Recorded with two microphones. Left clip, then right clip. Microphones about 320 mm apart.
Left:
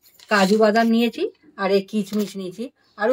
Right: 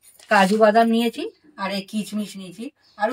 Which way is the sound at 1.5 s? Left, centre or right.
Centre.